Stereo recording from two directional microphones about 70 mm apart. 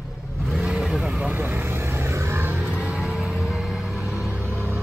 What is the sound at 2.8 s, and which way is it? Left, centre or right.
Vehicle, centre.